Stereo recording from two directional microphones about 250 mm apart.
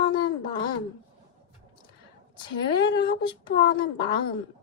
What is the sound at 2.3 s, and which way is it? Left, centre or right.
Speech, centre.